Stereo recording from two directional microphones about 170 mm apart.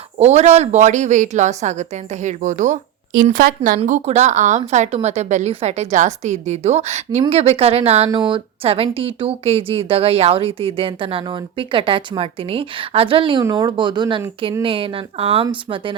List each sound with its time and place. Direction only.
0.2 s a woman's voice: 40° right (ahead or behind)
3.8 s a woman's voice: 45° right (ahead or behind)